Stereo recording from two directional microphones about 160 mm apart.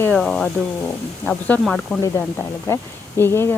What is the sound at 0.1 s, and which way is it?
Speech, 5° left (ahead or behind).